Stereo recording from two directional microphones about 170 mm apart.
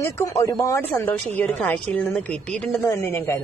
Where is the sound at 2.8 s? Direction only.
15° left (ahead or behind).